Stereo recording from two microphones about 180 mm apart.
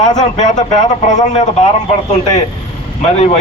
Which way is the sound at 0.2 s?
40° left (ahead or behind).